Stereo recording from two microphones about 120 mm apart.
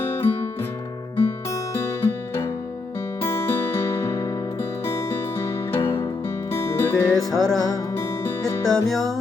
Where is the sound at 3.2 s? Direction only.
25° left (ahead or behind).